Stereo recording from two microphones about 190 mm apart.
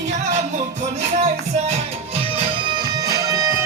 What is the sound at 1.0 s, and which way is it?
Music, 35° right (ahead or behind).